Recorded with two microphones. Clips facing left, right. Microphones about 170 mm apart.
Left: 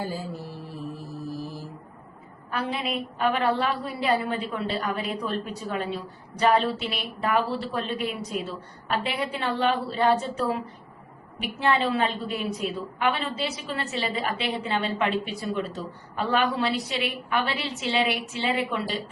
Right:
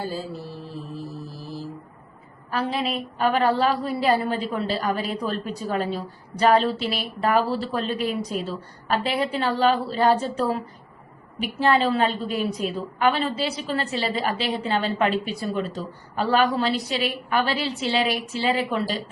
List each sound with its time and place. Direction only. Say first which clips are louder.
2.5 s a woman's voice: right 3 dB; 35° right (ahead or behind)
11.6 s a woman's voice: right 3 dB; 35° right (ahead or behind)